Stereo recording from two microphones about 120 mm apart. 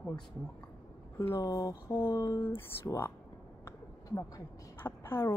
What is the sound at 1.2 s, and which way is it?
Speech, 25° left (ahead or behind).